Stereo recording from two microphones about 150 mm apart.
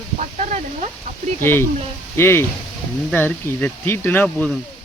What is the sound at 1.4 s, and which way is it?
Speech, 15° left (ahead or behind).